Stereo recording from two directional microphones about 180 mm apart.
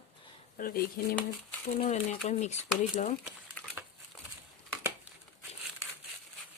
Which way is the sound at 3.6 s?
5° left (ahead or behind).